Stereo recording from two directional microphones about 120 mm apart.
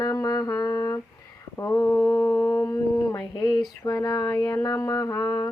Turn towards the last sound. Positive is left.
turn(degrees=25)  # may be behind; listen again after turning